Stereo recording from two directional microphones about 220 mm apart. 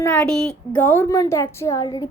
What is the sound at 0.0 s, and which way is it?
A woman's voice, 5° left (ahead or behind).